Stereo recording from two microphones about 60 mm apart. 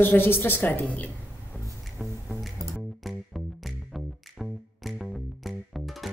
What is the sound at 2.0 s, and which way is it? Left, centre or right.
Music, centre.